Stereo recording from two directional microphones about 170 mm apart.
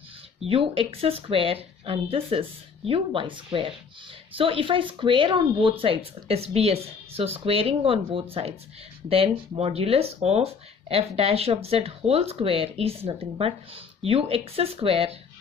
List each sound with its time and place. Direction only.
0.5 s speech: 35° right (ahead or behind)